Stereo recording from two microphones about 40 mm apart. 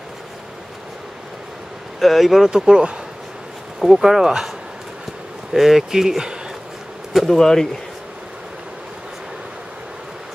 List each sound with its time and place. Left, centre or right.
2.0 s speech: centre
2.5 s speech: centre
3.8 s speech: centre
5.5 s speech: centre
7.3 s speech: centre